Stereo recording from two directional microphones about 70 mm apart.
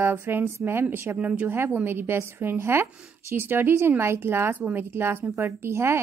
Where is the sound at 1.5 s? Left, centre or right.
Right.